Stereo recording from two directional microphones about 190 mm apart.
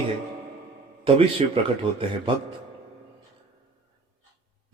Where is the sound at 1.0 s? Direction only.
30° right (ahead or behind).